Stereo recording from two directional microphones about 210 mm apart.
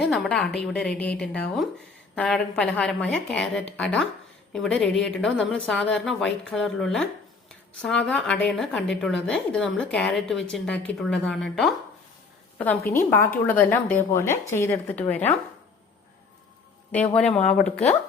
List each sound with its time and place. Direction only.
0.0 s a woman's voice: centre (ahead or behind)
12.9 s speech: 10° left (ahead or behind)
16.9 s speech: 5° left (ahead or behind)